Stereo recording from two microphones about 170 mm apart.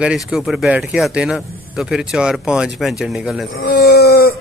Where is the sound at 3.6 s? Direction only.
65° left (ahead or behind).